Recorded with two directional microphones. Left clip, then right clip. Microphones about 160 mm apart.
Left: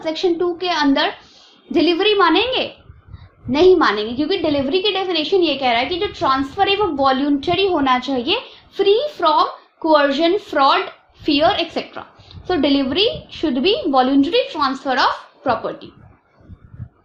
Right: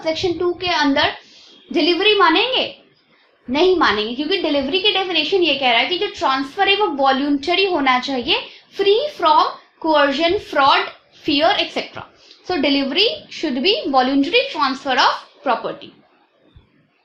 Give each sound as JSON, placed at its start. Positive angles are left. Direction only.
{"t": 0.0, "sound": "a woman's voice", "side_deg": 30}